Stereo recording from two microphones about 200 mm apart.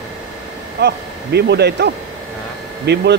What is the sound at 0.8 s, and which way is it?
Speech, 55° right (ahead or behind).